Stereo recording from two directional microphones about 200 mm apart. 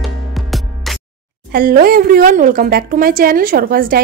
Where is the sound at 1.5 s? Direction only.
45° right (ahead or behind).